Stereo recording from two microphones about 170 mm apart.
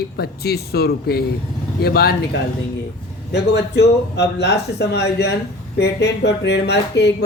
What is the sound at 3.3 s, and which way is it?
Speech, 80° left.